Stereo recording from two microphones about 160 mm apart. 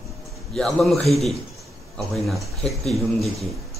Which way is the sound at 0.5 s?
Centre (ahead or behind).